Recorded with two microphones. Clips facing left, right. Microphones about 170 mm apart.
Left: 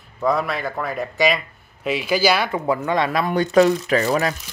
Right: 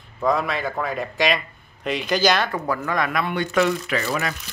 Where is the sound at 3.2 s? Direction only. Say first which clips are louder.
Left 7 dB; 35° left (ahead or behind).